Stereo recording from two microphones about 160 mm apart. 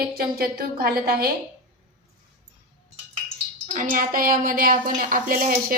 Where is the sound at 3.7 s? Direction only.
60° right (ahead or behind).